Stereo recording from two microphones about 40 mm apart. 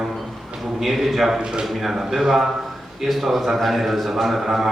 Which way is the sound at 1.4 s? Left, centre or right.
Centre.